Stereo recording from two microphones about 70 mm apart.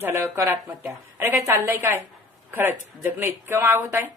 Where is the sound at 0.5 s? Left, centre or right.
Right.